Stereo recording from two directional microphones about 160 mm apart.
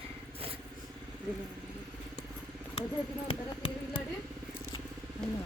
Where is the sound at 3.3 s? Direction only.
30° left (ahead or behind).